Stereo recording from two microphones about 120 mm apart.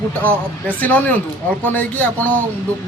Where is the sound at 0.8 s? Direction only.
15° left (ahead or behind).